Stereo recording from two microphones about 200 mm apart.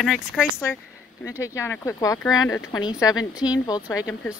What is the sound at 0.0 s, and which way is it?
Speech, centre (ahead or behind).